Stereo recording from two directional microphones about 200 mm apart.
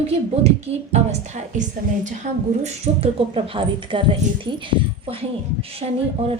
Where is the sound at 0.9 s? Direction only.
35° right (ahead or behind).